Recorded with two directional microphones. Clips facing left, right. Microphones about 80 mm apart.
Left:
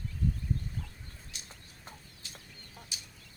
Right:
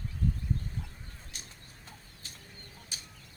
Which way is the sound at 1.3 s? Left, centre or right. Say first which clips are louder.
Right 3 dB; right.